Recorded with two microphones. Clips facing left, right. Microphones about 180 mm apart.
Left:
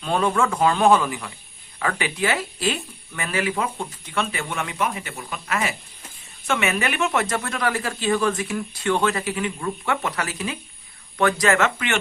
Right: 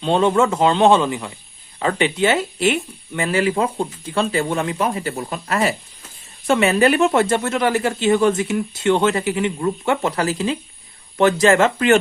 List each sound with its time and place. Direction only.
0.0 s speech: 25° right (ahead or behind)